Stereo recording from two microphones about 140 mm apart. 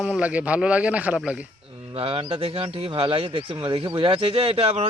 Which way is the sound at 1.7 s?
40° right (ahead or behind).